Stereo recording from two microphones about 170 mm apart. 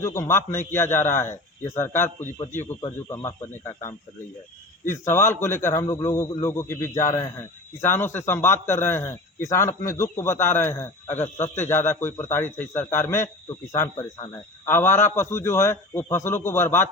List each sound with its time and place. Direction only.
0.0 s a man's voice: 15° left (ahead or behind)